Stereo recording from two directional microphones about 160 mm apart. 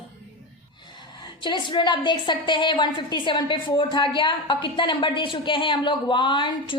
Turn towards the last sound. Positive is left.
turn(degrees=30)  # may be behind; listen again after turning